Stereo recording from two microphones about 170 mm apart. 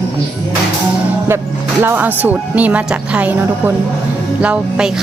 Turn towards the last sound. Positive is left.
turn(degrees=-5)  # may be behind; listen again after turning